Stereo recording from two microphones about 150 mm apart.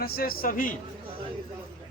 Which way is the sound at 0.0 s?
80° left.